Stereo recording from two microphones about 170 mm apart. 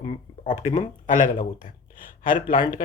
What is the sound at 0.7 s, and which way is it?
Speech, 50° left (ahead or behind).